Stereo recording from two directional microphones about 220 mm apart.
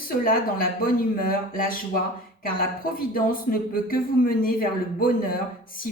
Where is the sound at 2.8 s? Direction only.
40° left (ahead or behind).